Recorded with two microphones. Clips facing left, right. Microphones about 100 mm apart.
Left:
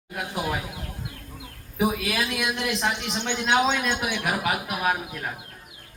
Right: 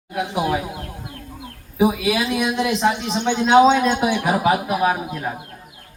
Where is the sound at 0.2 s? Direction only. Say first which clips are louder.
Right 7 dB; 20° right (ahead or behind).